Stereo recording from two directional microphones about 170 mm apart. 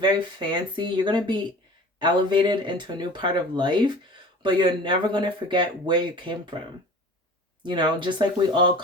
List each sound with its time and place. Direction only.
0.0 s speech: 25° right (ahead or behind)
7.6 s speech: 25° right (ahead or behind)